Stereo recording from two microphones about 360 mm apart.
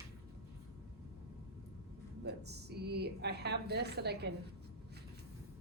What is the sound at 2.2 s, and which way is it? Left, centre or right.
Speech, right.